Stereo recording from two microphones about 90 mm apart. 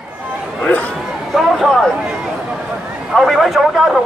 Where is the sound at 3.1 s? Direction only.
Centre (ahead or behind).